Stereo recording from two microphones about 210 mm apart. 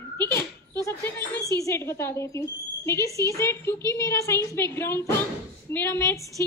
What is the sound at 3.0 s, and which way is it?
Speech, 15° right (ahead or behind).